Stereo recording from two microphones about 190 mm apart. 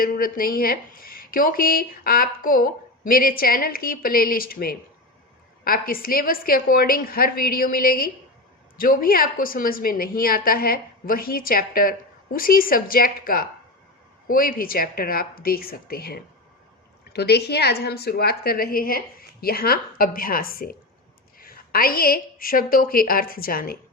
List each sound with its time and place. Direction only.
0.0 s a woman's voice: 50° left (ahead or behind)